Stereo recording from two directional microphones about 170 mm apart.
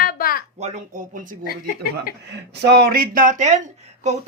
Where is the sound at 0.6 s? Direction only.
50° right (ahead or behind).